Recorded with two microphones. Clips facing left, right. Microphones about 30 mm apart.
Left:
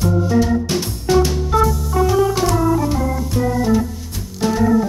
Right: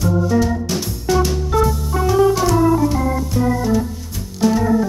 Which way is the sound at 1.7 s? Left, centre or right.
Centre.